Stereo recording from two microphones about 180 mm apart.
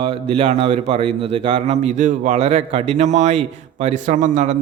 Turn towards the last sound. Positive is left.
turn(degrees=-40)  # may be behind; listen again after turning